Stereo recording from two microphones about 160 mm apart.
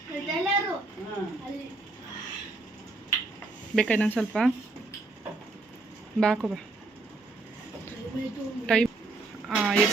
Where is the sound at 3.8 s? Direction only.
10° left (ahead or behind).